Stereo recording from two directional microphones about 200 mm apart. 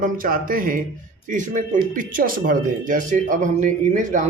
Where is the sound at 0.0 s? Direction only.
45° right (ahead or behind).